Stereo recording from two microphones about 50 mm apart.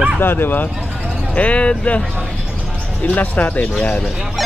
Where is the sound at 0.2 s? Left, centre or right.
Left.